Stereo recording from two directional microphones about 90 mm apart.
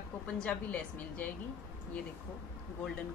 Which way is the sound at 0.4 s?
15° left (ahead or behind).